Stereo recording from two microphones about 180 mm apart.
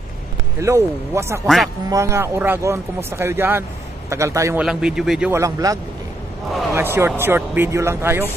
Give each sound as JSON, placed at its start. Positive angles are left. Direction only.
{"t": 0.6, "sound": "speech", "side_deg": -15}
{"t": 4.6, "sound": "speech", "side_deg": -5}
{"t": 5.3, "sound": "speech", "side_deg": -20}